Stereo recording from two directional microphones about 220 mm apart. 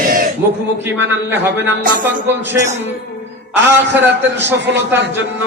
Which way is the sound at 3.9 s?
10° right (ahead or behind).